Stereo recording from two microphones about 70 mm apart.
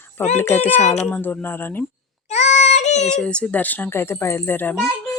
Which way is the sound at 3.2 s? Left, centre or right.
Centre.